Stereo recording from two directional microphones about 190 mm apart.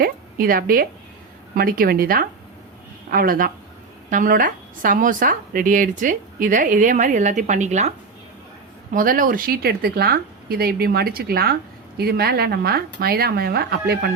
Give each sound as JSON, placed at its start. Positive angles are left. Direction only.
{"t": 0.0, "sound": "a woman's voice", "side_deg": -50}